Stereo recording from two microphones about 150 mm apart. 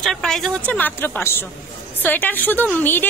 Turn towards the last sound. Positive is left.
turn(degrees=15)  # may be behind; listen again after turning